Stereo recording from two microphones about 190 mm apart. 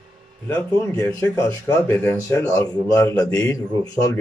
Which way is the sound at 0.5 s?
15° left (ahead or behind).